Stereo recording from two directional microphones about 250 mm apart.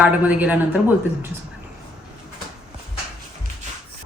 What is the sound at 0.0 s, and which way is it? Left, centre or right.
A woman's voice, centre.